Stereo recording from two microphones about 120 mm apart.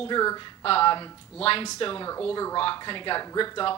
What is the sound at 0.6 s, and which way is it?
Speech, 50° left (ahead or behind).